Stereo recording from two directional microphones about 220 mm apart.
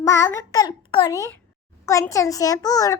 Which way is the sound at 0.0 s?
15° left (ahead or behind).